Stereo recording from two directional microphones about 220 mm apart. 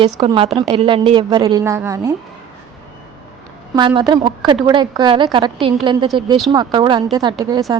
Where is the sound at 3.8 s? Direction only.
20° right (ahead or behind).